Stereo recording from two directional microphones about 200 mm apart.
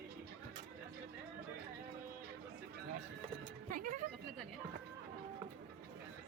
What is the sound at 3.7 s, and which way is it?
Music, 45° right (ahead or behind).